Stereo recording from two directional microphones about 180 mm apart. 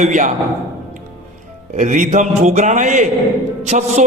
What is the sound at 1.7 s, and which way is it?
A man's voice, 45° right (ahead or behind).